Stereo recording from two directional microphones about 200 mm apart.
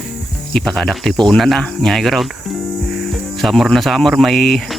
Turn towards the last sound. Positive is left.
turn(degrees=0)  # may be behind; listen again after turning